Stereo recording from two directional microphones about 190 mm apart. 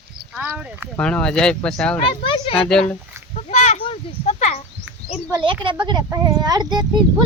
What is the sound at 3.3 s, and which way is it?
Speech, 35° left (ahead or behind).